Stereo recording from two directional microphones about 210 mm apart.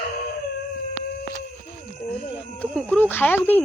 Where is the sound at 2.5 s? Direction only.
5° left (ahead or behind).